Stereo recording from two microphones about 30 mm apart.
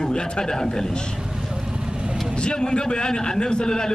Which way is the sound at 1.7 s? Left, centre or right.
Right.